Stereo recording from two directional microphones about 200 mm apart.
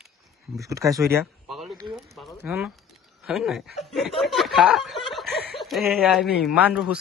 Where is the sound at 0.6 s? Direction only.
15° right (ahead or behind).